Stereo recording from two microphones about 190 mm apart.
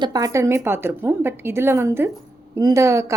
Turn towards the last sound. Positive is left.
turn(degrees=-15)  # may be behind; listen again after turning